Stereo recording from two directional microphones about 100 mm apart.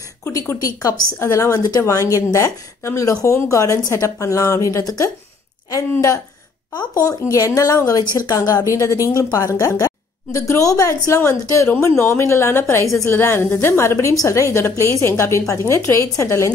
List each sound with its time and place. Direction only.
0.3 s speech: 35° left (ahead or behind)